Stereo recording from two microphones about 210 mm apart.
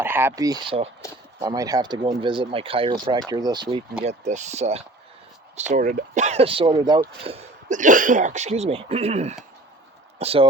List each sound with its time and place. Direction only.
0.0 s speech: 10° right (ahead or behind)
4.0 s speech: 35° right (ahead or behind)
7.3 s speech: 30° right (ahead or behind)